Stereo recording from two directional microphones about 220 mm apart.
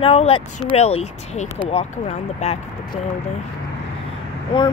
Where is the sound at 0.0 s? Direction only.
25° left (ahead or behind).